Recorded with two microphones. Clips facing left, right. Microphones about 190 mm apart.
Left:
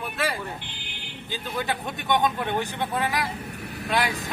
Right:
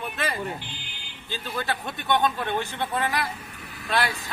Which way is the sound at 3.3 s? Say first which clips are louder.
Left 7 dB; 65° left (ahead or behind).